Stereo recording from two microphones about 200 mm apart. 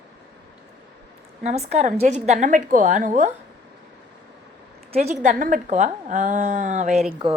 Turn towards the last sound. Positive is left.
turn(degrees=-35)  # may be behind; listen again after turning